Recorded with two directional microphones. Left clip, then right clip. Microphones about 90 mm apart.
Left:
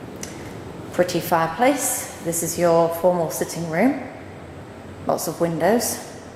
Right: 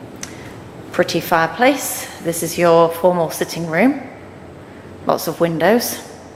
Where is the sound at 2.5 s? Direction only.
55° right (ahead or behind).